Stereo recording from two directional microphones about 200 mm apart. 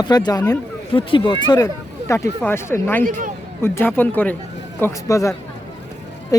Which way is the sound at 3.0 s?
45° right (ahead or behind).